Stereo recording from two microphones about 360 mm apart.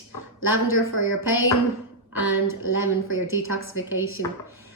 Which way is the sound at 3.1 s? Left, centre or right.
Left.